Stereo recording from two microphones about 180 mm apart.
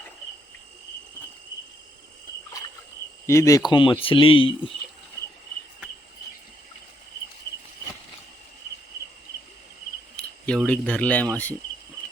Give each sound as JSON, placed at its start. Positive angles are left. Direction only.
{"t": 3.2, "sound": "speech", "side_deg": 15}
{"t": 3.7, "sound": "speech", "side_deg": 30}
{"t": 10.2, "sound": "speech", "side_deg": 5}